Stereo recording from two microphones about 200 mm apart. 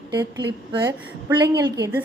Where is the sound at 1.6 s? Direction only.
15° right (ahead or behind).